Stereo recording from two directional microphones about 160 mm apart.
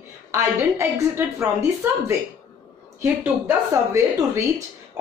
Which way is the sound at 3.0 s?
15° right (ahead or behind).